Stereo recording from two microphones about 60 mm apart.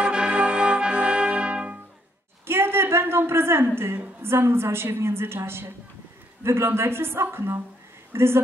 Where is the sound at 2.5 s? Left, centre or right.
Right.